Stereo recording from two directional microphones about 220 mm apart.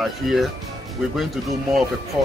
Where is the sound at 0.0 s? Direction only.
Centre (ahead or behind).